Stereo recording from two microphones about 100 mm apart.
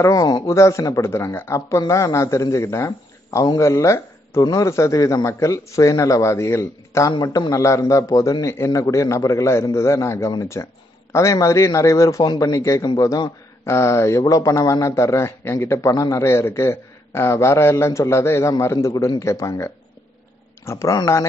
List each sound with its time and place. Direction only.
0.0 s speech: 35° left (ahead or behind)
7.2 s speech: 40° left (ahead or behind)